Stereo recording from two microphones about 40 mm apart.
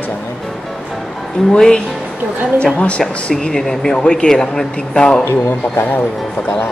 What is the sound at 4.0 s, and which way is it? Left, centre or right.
Speech, left.